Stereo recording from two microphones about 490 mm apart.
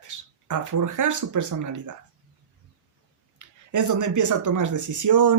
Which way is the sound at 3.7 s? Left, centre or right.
Right.